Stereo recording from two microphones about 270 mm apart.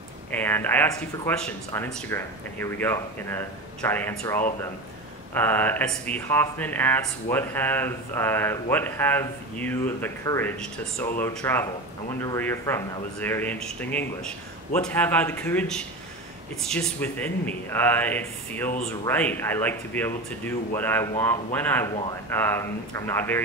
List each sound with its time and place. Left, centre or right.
0.3 s speech: centre